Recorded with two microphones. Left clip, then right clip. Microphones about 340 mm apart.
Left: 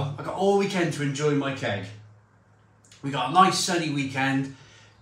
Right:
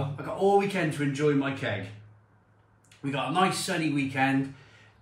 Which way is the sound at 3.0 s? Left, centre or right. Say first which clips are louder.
Left 6 dB; centre.